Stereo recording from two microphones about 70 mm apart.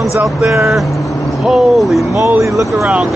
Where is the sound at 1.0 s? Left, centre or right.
Centre.